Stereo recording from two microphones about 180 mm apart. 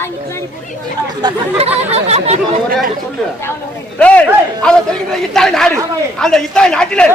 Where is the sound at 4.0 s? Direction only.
10° left (ahead or behind).